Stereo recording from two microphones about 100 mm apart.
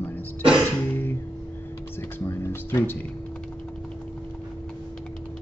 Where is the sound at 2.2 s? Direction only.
25° left (ahead or behind).